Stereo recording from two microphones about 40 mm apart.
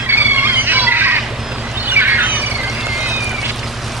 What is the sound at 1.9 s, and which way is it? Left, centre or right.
Bird, right.